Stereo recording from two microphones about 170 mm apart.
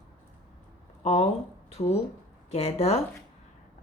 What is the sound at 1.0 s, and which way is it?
Speech, 35° left (ahead or behind).